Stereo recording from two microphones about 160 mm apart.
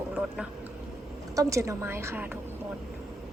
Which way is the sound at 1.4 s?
20° right (ahead or behind).